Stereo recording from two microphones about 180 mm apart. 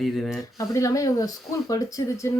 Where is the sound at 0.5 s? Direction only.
20° left (ahead or behind).